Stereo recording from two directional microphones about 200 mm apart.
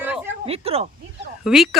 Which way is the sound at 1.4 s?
Centre (ahead or behind).